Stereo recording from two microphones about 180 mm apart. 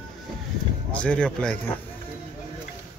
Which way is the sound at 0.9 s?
5° left (ahead or behind).